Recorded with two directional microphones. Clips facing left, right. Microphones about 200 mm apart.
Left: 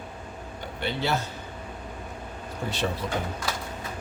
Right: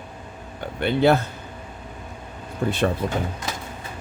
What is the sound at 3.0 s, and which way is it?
Speech, 50° right (ahead or behind).